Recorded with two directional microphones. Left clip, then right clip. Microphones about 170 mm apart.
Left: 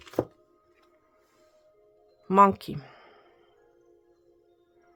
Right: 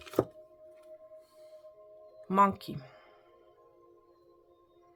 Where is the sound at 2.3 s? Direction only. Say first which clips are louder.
Left 6 dB; 35° left (ahead or behind).